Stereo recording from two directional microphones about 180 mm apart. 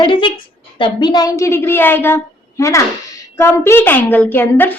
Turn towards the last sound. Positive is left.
turn(degrees=10)  # may be behind; listen again after turning